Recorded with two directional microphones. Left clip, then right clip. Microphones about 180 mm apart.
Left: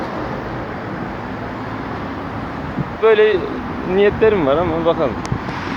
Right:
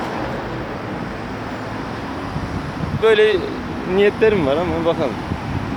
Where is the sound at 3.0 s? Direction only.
15° right (ahead or behind).